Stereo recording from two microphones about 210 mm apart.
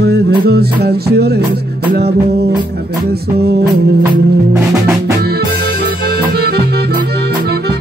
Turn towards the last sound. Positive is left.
turn(degrees=-50)  # may be behind; listen again after turning